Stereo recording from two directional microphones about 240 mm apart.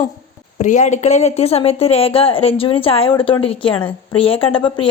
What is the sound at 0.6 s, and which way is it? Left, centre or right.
A woman's voice, left.